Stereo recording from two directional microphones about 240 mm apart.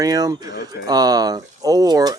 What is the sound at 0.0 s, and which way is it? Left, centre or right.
Speech, centre.